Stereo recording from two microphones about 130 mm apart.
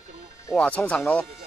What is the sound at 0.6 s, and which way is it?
Speech, 10° left (ahead or behind).